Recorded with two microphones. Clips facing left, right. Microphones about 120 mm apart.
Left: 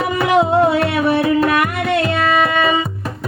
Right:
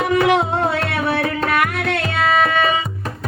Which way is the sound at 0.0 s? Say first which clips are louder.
Left 1 dB; 5° left (ahead or behind).